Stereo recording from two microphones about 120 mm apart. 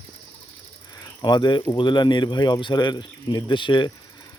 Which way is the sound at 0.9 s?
35° left (ahead or behind).